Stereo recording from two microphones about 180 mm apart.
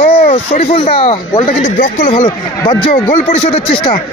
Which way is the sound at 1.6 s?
45° left (ahead or behind).